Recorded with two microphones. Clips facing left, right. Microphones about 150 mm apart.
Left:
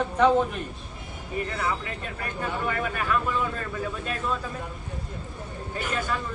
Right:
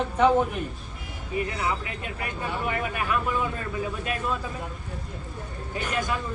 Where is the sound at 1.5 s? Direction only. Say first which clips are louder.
Even; 20° right (ahead or behind).